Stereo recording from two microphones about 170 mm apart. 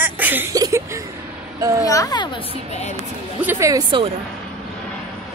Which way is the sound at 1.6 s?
20° right (ahead or behind).